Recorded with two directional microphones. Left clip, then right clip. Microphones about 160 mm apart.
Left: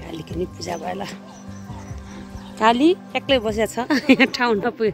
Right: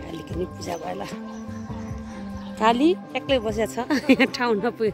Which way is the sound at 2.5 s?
5° right (ahead or behind).